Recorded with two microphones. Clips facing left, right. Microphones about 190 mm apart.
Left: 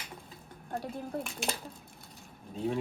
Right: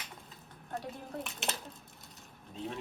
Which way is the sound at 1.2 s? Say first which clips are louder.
Left 3 dB; 5° right (ahead or behind).